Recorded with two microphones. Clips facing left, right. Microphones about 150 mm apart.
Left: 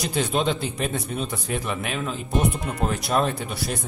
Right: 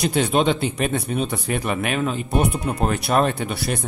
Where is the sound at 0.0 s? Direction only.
65° right (ahead or behind).